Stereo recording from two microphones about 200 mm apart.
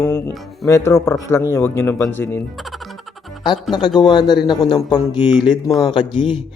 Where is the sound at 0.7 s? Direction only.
15° left (ahead or behind).